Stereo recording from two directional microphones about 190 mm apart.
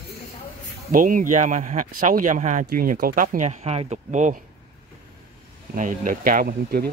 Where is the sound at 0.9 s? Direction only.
45° right (ahead or behind).